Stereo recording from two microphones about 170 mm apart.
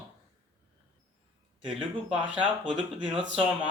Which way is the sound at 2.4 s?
5° right (ahead or behind).